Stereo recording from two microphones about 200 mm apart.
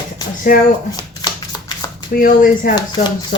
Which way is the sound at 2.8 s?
25° left (ahead or behind).